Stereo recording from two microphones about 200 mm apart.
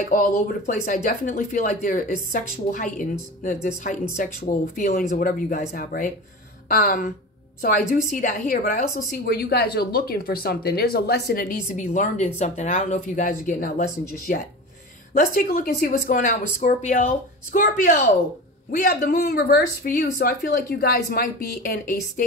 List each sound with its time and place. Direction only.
0.0 s a woman's voice: 40° left (ahead or behind)
18.7 s a woman's voice: 40° left (ahead or behind)